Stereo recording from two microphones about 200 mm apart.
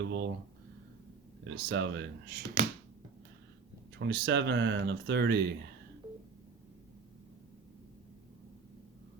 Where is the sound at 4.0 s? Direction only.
60° right (ahead or behind).